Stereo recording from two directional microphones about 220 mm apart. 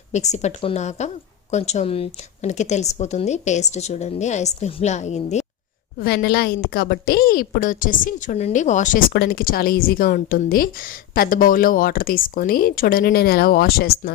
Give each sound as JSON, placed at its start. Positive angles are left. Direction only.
{"t": 0.1, "sound": "a woman's voice", "side_deg": 30}
{"t": 6.0, "sound": "a woman's voice", "side_deg": 45}